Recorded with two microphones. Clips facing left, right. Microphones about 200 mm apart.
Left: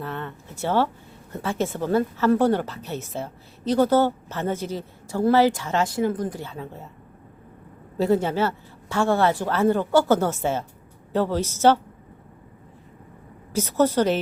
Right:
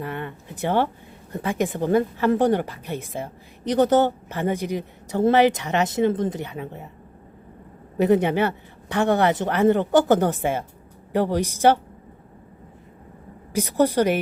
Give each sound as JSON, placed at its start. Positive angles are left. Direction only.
{"t": 0.0, "sound": "a woman's voice", "side_deg": -15}
{"t": 7.9, "sound": "a woman's voice", "side_deg": -20}
{"t": 13.5, "sound": "a woman's voice", "side_deg": -15}